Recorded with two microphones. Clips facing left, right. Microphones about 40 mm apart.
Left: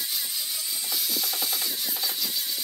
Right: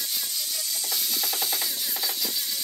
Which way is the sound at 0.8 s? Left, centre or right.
Centre.